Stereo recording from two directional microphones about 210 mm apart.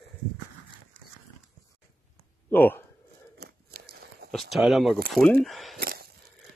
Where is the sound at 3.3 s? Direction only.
50° right (ahead or behind).